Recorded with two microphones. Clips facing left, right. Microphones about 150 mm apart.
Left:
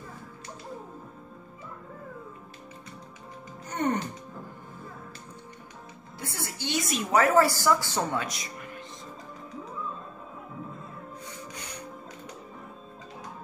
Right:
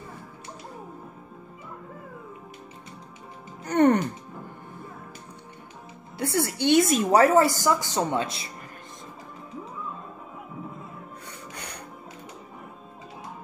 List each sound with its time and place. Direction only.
3.6 s music: 70° right (ahead or behind)
6.1 s a woman's voice: 70° right (ahead or behind)
7.1 s a woman's voice: 35° right (ahead or behind)
7.3 s a woman's voice: 20° right (ahead or behind)
11.5 s printer: 60° right (ahead or behind)